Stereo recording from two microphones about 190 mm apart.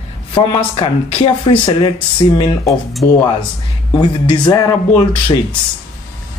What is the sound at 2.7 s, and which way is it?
Speech, centre (ahead or behind).